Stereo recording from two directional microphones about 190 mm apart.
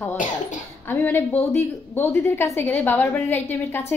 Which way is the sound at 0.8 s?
10° left (ahead or behind).